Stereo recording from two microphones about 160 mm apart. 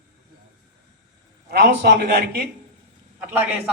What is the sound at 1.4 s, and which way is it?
Speech, 85° right.